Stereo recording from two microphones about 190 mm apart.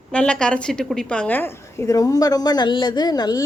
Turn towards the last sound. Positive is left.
turn(degrees=20)  # may be behind; listen again after turning